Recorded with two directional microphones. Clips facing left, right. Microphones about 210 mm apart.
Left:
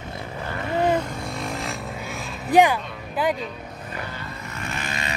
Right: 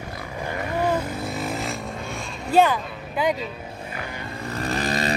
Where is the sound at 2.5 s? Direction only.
15° left (ahead or behind).